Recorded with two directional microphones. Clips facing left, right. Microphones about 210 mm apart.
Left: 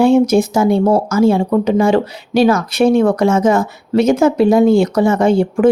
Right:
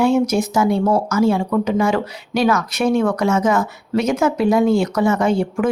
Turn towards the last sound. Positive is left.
turn(degrees=30)  # may be behind; listen again after turning